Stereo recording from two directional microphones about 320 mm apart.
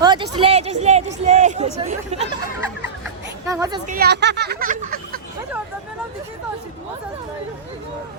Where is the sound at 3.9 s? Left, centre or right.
Right.